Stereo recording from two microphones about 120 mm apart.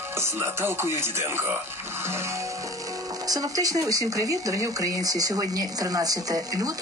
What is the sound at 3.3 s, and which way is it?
Speech, 30° right (ahead or behind).